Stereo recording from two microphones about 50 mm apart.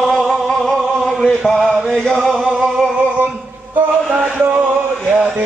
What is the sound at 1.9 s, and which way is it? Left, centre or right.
Chant, centre.